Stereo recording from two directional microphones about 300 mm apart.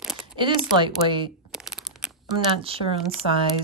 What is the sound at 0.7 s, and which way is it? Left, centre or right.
Speech, centre.